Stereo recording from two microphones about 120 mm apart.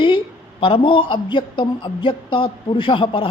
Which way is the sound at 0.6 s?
45° left (ahead or behind).